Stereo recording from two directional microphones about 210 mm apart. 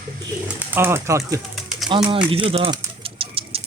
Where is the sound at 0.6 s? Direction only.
10° right (ahead or behind).